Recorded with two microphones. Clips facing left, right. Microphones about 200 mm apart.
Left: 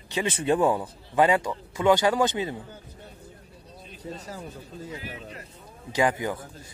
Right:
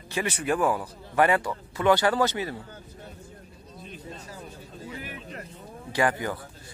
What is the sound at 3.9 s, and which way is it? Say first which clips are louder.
Speech: left 5 dB; 40° left (ahead or behind).